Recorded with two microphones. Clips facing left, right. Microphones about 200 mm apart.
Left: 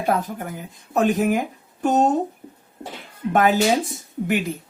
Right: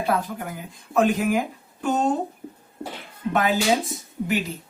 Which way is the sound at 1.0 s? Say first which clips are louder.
Left 5 dB; 45° left (ahead or behind).